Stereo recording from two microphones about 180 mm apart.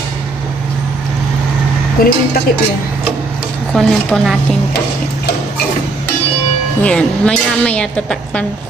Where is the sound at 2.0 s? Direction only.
55° left (ahead or behind).